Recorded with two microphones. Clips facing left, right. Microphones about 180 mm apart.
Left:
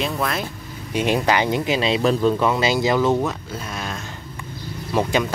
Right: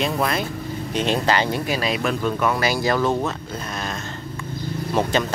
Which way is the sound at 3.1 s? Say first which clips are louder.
Left 2 dB; 5° left (ahead or behind).